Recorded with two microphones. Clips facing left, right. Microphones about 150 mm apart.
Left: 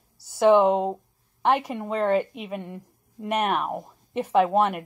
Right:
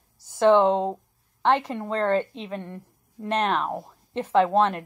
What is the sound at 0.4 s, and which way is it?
Speech, 10° left (ahead or behind).